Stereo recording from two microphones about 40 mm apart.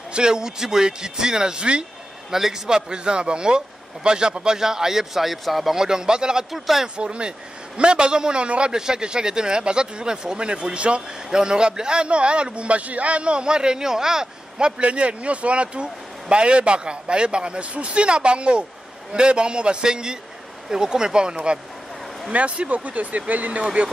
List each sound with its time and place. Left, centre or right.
0.1 s a man's voice: centre
2.3 s speech: centre
5.8 s speech: centre
6.5 s speech: centre
7.0 s a man's voice: right
14.8 s a man's voice: right